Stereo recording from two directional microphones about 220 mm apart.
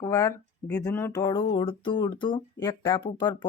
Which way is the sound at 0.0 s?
15° left (ahead or behind).